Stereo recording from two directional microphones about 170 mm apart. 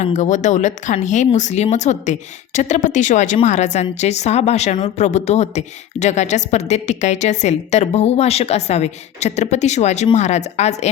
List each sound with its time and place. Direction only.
0.0 s speech: 45° left (ahead or behind)